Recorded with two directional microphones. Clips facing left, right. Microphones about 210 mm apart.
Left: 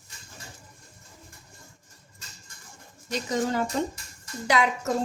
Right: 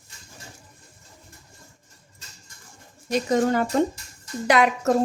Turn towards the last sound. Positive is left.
turn(degrees=-65)  # may be behind; listen again after turning